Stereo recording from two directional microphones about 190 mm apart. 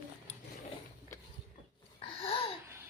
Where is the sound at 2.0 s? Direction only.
30° left (ahead or behind).